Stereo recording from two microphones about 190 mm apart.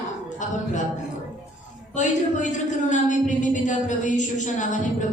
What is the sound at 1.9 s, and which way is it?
A woman's voice, 40° left (ahead or behind).